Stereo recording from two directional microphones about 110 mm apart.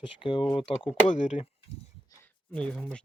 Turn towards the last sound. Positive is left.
turn(degrees=10)  # may be behind; listen again after turning